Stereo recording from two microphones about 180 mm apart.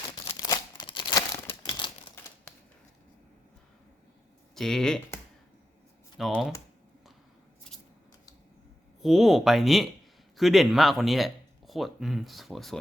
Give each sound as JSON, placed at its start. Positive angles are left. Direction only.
{"t": 0.3, "sound": "crumpling", "side_deg": 20}
{"t": 1.5, "sound": "a sound", "side_deg": 25}
{"t": 4.5, "sound": "speech", "side_deg": 0}
{"t": 6.1, "sound": "speech", "side_deg": 0}
{"t": 9.0, "sound": "speech", "side_deg": 0}